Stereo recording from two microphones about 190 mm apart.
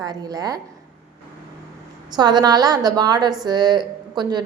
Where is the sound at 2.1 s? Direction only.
20° right (ahead or behind).